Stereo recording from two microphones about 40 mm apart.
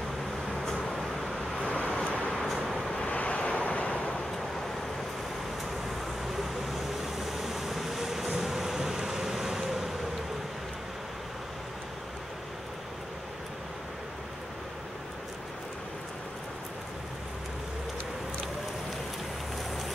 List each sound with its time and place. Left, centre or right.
0.8 s vehicle: centre
1.6 s vehicle: left
2.3 s vehicle: centre
3.1 s waves: left
6.6 s vehicle: centre